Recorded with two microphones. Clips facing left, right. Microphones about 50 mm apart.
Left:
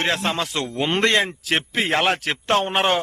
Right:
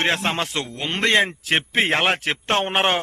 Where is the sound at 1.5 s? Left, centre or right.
Centre.